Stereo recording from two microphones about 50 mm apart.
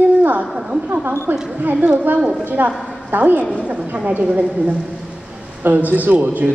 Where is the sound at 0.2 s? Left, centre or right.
Right.